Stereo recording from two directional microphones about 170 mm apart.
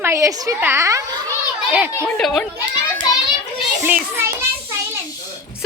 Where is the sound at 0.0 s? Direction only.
15° right (ahead or behind).